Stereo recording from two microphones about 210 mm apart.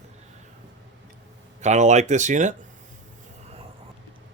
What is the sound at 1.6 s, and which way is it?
Speech, 35° right (ahead or behind).